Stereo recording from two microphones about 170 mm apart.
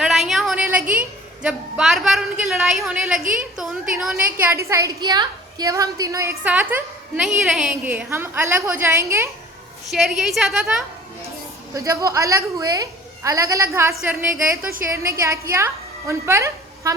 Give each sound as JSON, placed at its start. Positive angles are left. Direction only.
{"t": 0.0, "sound": "a sound", "side_deg": 0}
{"t": 3.3, "sound": "a woman's voice", "side_deg": -5}
{"t": 9.9, "sound": "a woman's voice", "side_deg": 0}
{"t": 11.7, "sound": "a woman's voice", "side_deg": -20}